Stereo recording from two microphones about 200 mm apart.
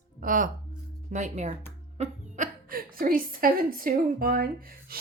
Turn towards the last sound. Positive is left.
turn(degrees=-50)  # may be behind; listen again after turning